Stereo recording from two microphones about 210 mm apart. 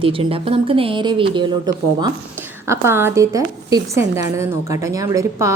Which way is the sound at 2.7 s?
10° right (ahead or behind).